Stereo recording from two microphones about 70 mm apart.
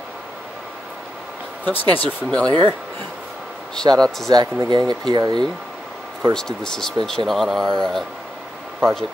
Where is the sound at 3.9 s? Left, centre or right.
Right.